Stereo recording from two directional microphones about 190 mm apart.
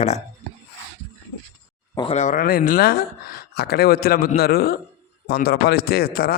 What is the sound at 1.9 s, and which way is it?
A man's voice, 30° left (ahead or behind).